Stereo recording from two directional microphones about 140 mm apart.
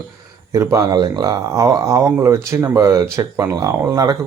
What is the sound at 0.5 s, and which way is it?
Speech, 25° right (ahead or behind).